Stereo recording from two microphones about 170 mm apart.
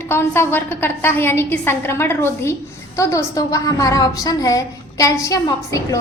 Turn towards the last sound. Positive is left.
turn(degrees=20)  # may be behind; listen again after turning